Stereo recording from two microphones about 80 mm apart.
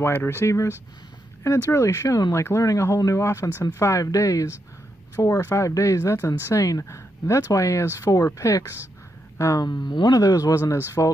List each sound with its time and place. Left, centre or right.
0.0 s speech: left
9.7 s speech: left